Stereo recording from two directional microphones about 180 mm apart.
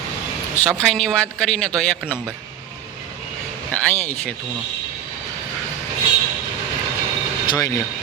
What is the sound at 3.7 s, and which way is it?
Speech, 10° left (ahead or behind).